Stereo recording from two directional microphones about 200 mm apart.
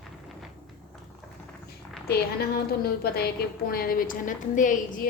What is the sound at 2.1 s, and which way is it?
A woman's voice, 50° left (ahead or behind).